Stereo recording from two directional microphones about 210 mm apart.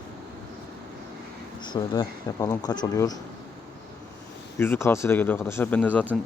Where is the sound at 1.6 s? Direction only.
20° left (ahead or behind).